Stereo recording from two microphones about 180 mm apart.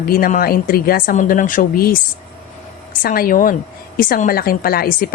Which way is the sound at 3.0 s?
55° left (ahead or behind).